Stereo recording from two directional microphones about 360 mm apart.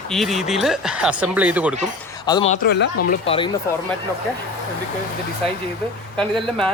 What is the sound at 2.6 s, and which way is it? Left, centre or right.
Speech, left.